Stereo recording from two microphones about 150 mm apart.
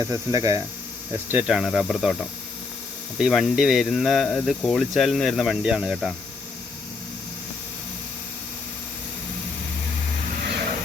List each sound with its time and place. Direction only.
0.0 s speech: 20° right (ahead or behind)
1.3 s speech: 10° right (ahead or behind)